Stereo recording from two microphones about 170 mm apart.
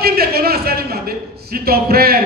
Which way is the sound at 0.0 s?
65° right (ahead or behind).